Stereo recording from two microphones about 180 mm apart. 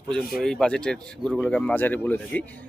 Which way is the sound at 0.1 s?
5° left (ahead or behind).